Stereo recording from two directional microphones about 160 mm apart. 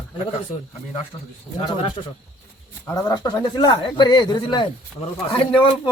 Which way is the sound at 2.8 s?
20° left (ahead or behind).